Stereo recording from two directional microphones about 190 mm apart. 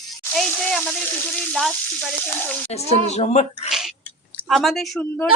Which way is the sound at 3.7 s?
Centre (ahead or behind).